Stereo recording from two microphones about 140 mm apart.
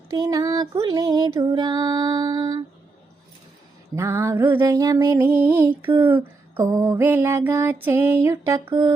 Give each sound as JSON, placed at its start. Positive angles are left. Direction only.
{"t": 0.2, "sound": "female singing", "side_deg": -25}
{"t": 3.9, "sound": "female singing", "side_deg": -20}
{"t": 5.1, "sound": "lullaby", "side_deg": -15}